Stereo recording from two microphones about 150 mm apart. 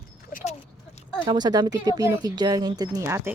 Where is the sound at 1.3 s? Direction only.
25° right (ahead or behind).